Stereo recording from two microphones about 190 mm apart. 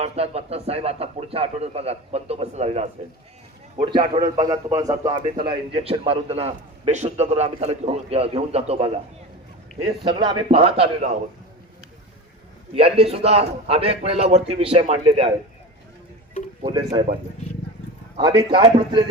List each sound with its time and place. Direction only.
0.0 s a man's voice: 35° right (ahead or behind)
3.8 s a man's voice: 25° right (ahead or behind)
5.5 s a man's voice: 30° right (ahead or behind)
12.7 s a man's voice: 30° right (ahead or behind)
16.6 s a man's voice: 25° right (ahead or behind)
18.2 s a man's voice: 25° right (ahead or behind)